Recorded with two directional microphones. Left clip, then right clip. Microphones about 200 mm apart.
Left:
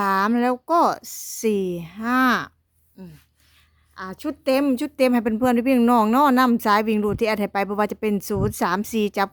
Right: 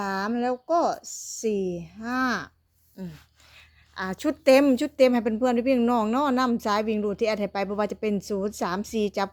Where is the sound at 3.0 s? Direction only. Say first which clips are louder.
Right 3 dB; 5° left (ahead or behind).